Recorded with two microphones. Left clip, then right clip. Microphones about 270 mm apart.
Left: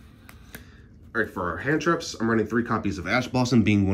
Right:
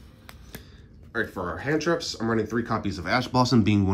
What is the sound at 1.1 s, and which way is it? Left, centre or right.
Speech, centre.